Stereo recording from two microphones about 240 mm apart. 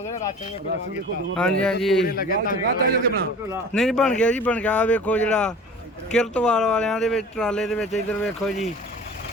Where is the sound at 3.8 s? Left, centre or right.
Centre.